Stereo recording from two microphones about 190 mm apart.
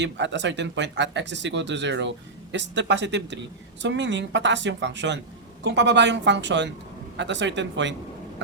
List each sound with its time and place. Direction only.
0.0 s speech: 70° right (ahead or behind)